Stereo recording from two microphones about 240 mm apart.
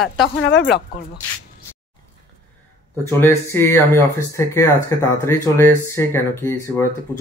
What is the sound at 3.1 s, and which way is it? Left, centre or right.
Speech, centre.